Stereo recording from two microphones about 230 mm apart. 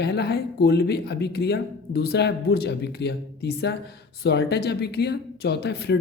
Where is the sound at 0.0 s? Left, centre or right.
Left.